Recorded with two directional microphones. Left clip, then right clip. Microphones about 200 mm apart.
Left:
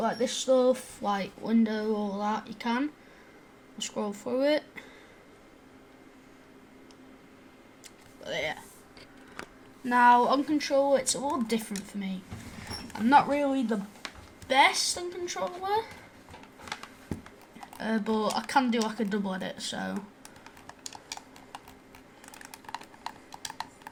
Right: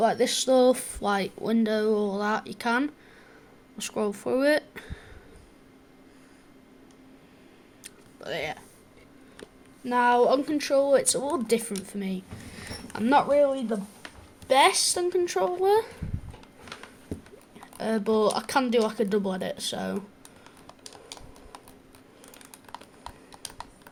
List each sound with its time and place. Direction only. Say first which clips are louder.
0.0 s speech: right 6 dB; 45° right (ahead or behind)
8.2 s speech: even; 25° right (ahead or behind)
9.8 s speech: left 1 dB; 10° right (ahead or behind); by 12.1 s 35° right (ahead or behind)
13.1 s speech: right 2 dB; 20° right (ahead or behind)
14.4 s speech: right 3 dB; 25° right (ahead or behind)
17.7 s speech: right 5 dB; 30° right (ahead or behind)
22.7 s clip-clop: left 3 dB; 15° left (ahead or behind)